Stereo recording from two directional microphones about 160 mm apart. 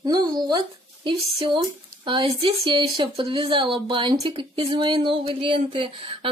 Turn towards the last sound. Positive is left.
turn(degrees=-35)  # may be behind; listen again after turning